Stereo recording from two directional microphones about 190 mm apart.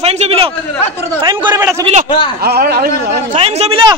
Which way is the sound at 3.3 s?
35° right (ahead or behind).